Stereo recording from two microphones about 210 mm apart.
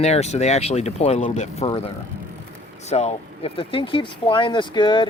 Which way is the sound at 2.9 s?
30° left (ahead or behind).